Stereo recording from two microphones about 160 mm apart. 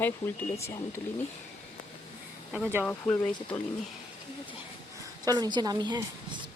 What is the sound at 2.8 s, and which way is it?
Speech, 10° left (ahead or behind).